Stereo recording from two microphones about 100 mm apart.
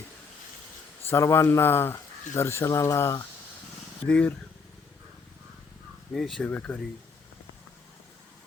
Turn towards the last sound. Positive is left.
turn(degrees=15)  # may be behind; listen again after turning